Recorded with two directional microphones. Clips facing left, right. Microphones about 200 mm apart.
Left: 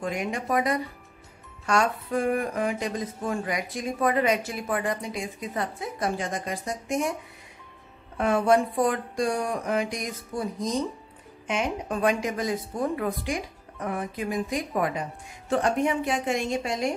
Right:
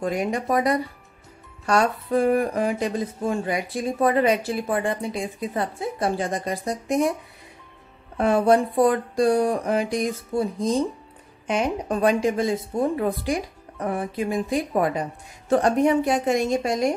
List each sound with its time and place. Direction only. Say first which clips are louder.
0.0 s a woman's voice: right 5 dB; 35° right (ahead or behind)
8.2 s a woman's voice: right 3 dB; 35° right (ahead or behind)